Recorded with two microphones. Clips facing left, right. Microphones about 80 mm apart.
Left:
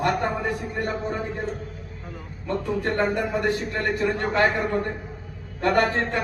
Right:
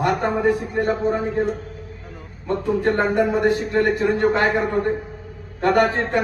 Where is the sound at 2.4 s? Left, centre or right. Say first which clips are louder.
Right 5 dB; right.